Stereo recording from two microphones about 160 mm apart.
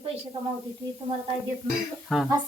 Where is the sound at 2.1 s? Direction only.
Centre (ahead or behind).